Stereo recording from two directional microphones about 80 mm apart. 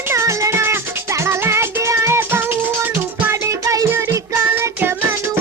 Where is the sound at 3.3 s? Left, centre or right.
Right.